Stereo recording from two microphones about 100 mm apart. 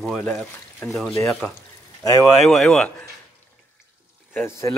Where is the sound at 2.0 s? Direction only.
35° left (ahead or behind).